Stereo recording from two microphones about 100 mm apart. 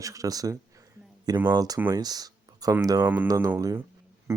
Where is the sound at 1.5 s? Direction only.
40° right (ahead or behind).